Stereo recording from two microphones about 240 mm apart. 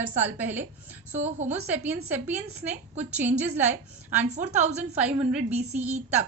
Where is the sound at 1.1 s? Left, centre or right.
Right.